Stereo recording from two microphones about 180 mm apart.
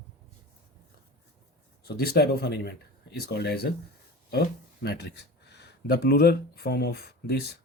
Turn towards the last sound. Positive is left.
turn(degrees=65)  # may be behind; listen again after turning